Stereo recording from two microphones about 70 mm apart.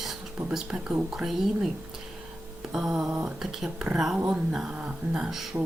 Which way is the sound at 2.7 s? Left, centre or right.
Centre.